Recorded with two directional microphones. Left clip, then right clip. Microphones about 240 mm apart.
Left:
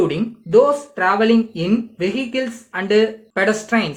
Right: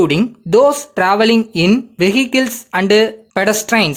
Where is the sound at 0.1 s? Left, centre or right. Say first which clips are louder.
Right 3 dB; right.